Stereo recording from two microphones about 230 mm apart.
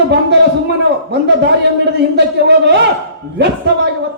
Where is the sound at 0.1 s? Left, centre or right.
Right.